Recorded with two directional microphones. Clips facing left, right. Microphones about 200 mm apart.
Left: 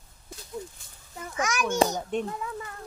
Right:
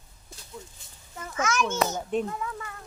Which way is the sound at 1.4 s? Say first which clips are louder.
Right 1 dB; 15° left (ahead or behind).